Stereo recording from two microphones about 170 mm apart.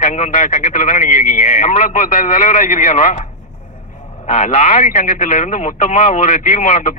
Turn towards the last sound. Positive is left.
turn(degrees=45)  # may be behind; listen again after turning